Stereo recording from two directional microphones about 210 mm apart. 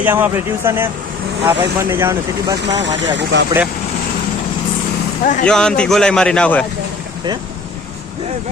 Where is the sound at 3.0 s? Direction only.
60° right (ahead or behind).